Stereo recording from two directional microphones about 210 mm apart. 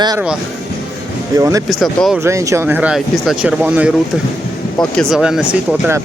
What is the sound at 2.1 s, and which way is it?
Speech, 15° right (ahead or behind).